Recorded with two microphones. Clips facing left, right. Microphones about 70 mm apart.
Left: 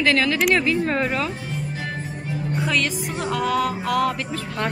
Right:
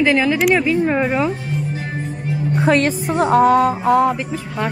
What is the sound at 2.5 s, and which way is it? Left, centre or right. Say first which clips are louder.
Music: right 8 dB; right.